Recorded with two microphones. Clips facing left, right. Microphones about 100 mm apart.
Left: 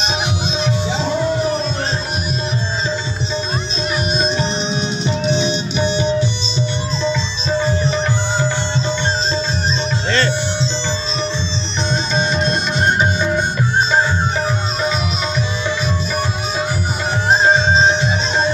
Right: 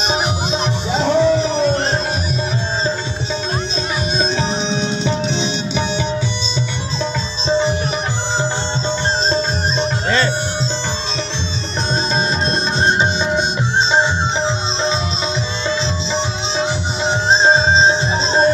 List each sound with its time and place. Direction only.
0.9 s music: 70° right (ahead or behind)
7.4 s sitar: 20° right (ahead or behind)
13.2 s music: 25° right (ahead or behind)
16.1 s music: 20° right (ahead or behind)